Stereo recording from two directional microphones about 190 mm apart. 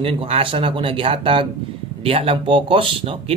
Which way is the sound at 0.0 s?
30° right (ahead or behind).